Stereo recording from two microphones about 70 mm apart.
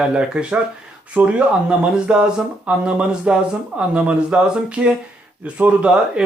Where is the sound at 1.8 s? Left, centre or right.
Centre.